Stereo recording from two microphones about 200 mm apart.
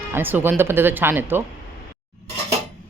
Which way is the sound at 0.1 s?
10° right (ahead or behind).